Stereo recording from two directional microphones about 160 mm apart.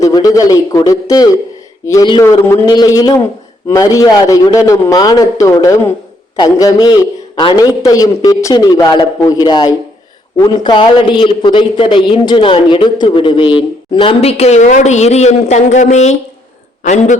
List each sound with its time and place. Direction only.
0.0 s a man's voice: 20° left (ahead or behind); by 17.2 s 50° left (ahead or behind)